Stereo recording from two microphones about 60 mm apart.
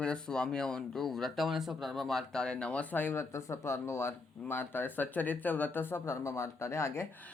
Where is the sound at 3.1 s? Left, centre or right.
Left.